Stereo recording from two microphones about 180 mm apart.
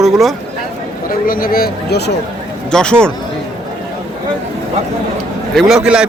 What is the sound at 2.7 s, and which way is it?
Speech, 5° left (ahead or behind).